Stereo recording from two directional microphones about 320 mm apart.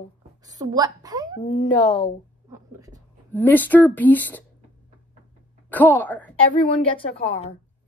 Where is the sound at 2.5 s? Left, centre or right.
Centre.